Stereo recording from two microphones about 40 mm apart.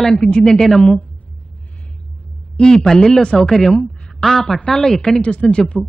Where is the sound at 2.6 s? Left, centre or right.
Centre.